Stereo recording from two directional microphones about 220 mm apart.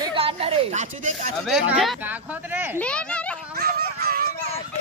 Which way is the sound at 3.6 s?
45° right (ahead or behind).